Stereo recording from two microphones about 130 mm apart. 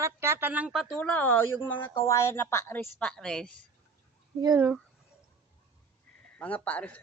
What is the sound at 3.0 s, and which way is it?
Speech, 5° left (ahead or behind).